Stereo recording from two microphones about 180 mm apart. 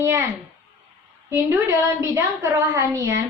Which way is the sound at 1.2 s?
15° right (ahead or behind).